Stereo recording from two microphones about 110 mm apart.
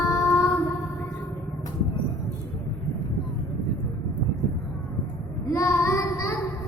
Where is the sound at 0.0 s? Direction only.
25° left (ahead or behind).